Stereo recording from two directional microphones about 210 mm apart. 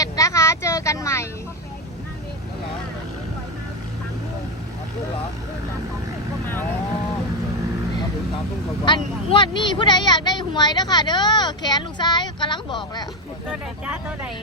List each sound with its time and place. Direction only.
0.0 s a sound: 15° left (ahead or behind)
8.8 s vehicle: 20° left (ahead or behind)
13.5 s speech: 5° right (ahead or behind)